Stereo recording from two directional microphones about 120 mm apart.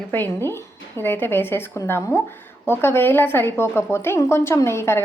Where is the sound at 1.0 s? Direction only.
20° left (ahead or behind).